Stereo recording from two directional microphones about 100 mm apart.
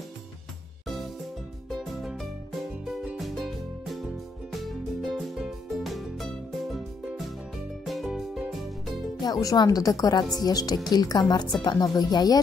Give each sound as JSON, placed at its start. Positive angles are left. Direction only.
{"t": 1.7, "sound": "music", "side_deg": 0}
{"t": 9.2, "sound": "speech", "side_deg": 40}